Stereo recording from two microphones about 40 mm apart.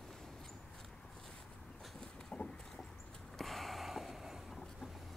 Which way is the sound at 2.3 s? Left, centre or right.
Left.